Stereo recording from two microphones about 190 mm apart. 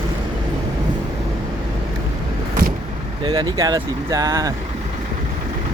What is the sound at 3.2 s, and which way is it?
Speech, 20° right (ahead or behind).